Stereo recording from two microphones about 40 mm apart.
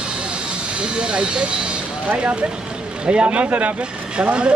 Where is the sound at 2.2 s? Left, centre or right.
Right.